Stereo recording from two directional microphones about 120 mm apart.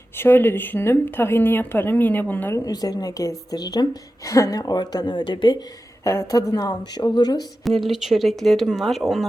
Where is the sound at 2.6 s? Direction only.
30° left (ahead or behind).